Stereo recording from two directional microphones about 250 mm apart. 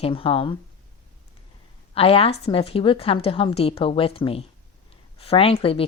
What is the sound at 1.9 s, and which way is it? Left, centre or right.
A woman's voice, left.